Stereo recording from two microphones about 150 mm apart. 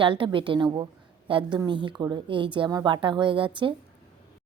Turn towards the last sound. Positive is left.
turn(degrees=-35)  # may be behind; listen again after turning